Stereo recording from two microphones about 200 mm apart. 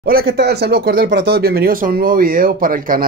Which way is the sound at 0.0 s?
50° right (ahead or behind).